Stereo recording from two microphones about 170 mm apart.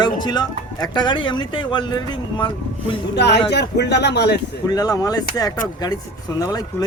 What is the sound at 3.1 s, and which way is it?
Speech, 80° left.